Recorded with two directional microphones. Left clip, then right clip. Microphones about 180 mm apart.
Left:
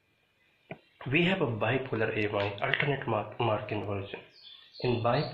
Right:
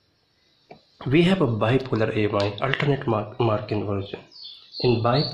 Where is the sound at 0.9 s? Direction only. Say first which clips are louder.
Right 8 dB; 40° right (ahead or behind).